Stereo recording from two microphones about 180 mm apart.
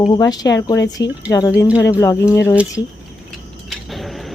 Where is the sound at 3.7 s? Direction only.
Centre (ahead or behind).